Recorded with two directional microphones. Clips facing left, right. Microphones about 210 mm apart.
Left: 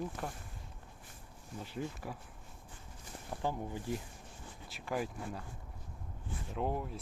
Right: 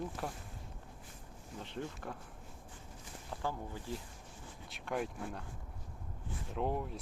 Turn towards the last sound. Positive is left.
turn(degrees=0)  # may be behind; listen again after turning